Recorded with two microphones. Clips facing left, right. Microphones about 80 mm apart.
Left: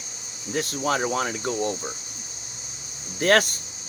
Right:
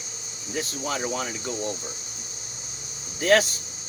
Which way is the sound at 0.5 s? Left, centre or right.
Left.